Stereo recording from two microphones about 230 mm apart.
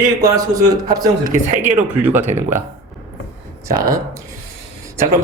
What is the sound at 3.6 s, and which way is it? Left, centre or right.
Speech, centre.